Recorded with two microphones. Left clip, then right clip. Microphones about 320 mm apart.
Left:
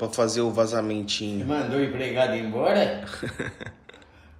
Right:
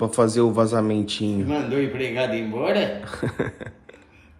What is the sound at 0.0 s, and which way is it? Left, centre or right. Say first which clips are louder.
Speech: right 5 dB; centre.